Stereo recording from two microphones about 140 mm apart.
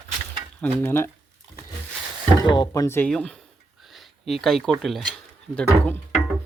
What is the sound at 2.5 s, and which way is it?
Speech, 30° left (ahead or behind).